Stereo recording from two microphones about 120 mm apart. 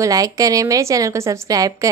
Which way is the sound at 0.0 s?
30° right (ahead or behind).